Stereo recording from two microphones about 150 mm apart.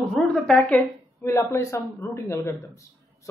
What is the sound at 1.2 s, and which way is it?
A man's voice, 20° left (ahead or behind).